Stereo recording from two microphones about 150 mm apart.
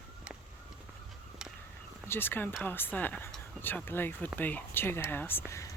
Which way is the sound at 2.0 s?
15° left (ahead or behind).